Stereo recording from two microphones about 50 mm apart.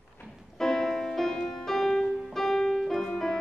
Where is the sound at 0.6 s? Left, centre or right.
Centre.